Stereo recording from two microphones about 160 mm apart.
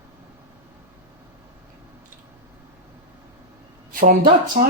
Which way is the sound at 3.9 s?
55° right (ahead or behind).